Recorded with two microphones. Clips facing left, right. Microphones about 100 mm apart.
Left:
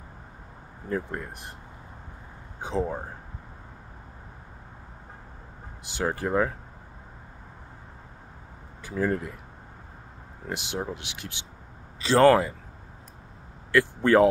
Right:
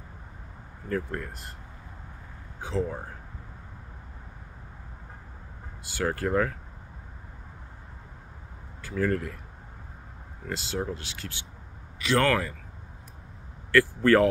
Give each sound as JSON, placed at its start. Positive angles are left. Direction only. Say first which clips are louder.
{"t": 0.8, "sound": "speech", "louder": "even", "side_deg": 15}
{"t": 2.6, "sound": "speech", "louder": "left 2 dB", "side_deg": 20}
{"t": 5.9, "sound": "speech", "louder": "even", "side_deg": 20}
{"t": 8.8, "sound": "speech", "louder": "even", "side_deg": 15}
{"t": 10.4, "sound": "speech", "louder": "even", "side_deg": 20}
{"t": 12.0, "sound": "speech", "louder": "left 6 dB", "side_deg": 30}
{"t": 13.7, "sound": "speech", "louder": "right 1 dB", "side_deg": 20}